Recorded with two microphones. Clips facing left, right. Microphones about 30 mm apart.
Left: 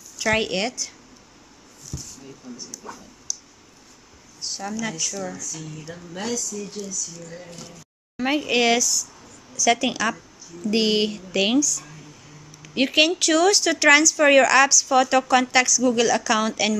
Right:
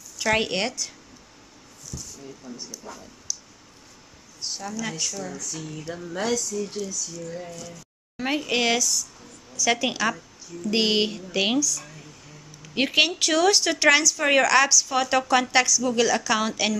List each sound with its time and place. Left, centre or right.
0.2 s speech: centre
1.9 s a sound: centre
2.5 s speech: right
2.9 s speech: centre
4.6 s speech: centre
5.6 s speech: centre
7.2 s speech: centre